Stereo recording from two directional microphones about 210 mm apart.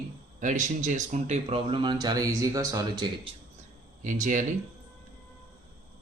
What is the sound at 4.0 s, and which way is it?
Speech, 35° right (ahead or behind).